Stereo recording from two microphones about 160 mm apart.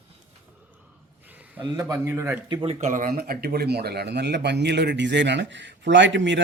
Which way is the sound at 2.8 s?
55° right (ahead or behind).